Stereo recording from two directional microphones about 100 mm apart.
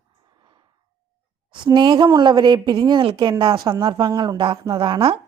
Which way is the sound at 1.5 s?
50° right (ahead or behind).